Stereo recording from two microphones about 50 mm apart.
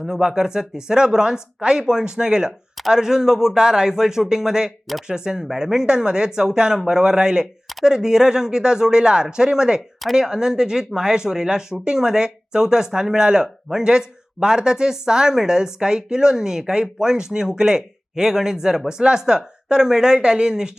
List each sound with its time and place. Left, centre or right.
0.0 s speech: centre